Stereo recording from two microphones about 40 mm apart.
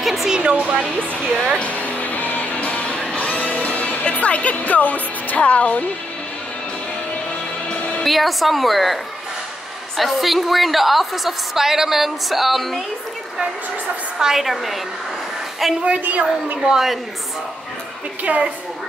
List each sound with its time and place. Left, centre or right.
0.0 s music: centre
0.4 s speech: right
1.6 s music: left
8.0 s a woman's voice: centre
14.1 s a woman's voice: centre
16.0 s a woman's voice: right
16.6 s a woman's voice: centre
18.3 s a woman's voice: right